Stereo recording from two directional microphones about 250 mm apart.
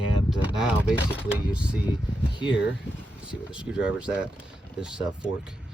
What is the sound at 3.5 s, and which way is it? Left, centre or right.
Speech, centre.